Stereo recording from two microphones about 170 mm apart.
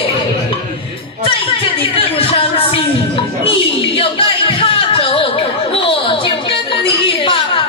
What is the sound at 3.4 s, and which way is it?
Music, 30° left (ahead or behind).